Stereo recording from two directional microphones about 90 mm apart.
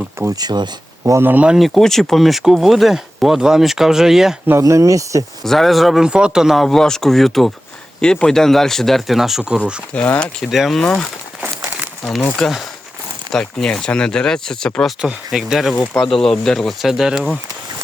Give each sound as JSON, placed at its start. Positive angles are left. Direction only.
{"t": 0.3, "sound": "speech", "side_deg": -50}
{"t": 1.1, "sound": "speech", "side_deg": -20}
{"t": 1.5, "sound": "speech", "side_deg": 0}
{"t": 4.6, "sound": "speech", "side_deg": -35}
{"t": 5.4, "sound": "speech", "side_deg": 0}
{"t": 9.9, "sound": "speech", "side_deg": 15}
{"t": 10.4, "sound": "speech", "side_deg": 0}
{"t": 12.4, "sound": "speech", "side_deg": 0}
{"t": 15.0, "sound": "speech", "side_deg": -5}